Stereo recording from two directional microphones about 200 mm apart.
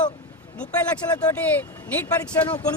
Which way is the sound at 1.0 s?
15° left (ahead or behind).